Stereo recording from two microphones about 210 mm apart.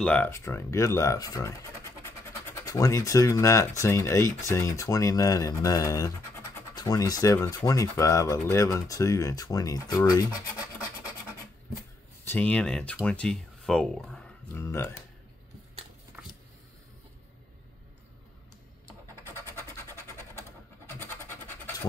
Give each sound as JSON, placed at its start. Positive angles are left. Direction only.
{"t": 0.0, "sound": "speech", "side_deg": 5}
{"t": 12.3, "sound": "speech", "side_deg": 5}
{"t": 19.2, "sound": "a sound", "side_deg": 10}